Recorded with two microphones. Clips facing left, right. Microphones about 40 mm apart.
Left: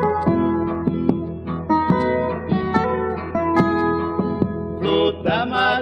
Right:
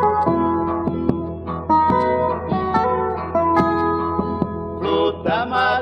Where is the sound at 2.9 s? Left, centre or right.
Centre.